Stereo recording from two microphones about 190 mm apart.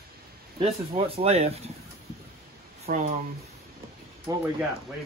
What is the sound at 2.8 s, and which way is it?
Speech, 50° right (ahead or behind).